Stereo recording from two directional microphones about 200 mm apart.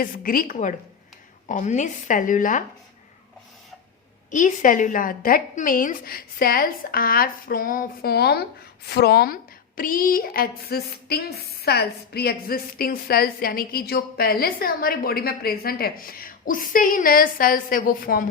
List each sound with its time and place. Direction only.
0.0 s a woman's voice: 45° left (ahead or behind)
4.3 s a woman's voice: 40° left (ahead or behind)